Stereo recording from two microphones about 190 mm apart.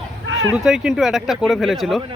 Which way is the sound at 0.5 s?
5° right (ahead or behind).